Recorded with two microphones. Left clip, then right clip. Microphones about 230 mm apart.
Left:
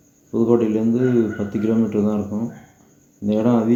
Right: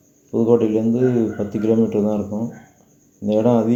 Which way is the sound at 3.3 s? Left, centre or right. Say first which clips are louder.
Right 3 dB; right.